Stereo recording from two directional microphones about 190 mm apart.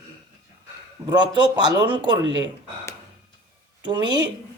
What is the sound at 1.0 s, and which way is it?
A man's voice, 20° right (ahead or behind).